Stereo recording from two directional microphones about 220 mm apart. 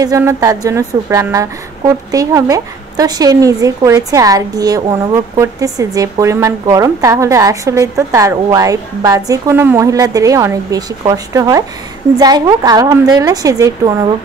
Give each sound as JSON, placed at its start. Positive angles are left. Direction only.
{"t": 0.0, "sound": "speech", "side_deg": -15}